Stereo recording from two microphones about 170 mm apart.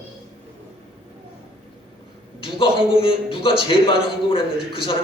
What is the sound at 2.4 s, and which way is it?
A man's voice, 30° left (ahead or behind).